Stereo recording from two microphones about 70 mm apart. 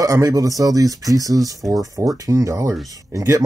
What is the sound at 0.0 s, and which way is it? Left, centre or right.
Speech, right.